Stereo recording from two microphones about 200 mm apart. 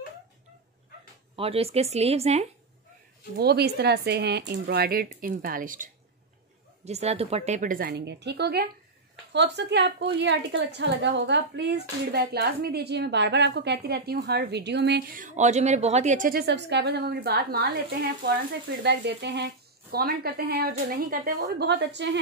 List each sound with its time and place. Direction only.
1.3 s speech: 30° right (ahead or behind)
3.3 s a woman's voice: 55° right (ahead or behind)
6.8 s a woman's voice: 35° right (ahead or behind); by 17.6 s 50° right (ahead or behind)
18.8 s a woman's voice: 60° right (ahead or behind)